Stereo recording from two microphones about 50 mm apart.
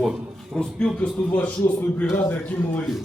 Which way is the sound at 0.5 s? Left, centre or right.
Centre.